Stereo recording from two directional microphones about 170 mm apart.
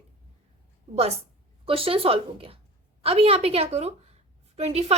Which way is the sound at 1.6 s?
35° right (ahead or behind).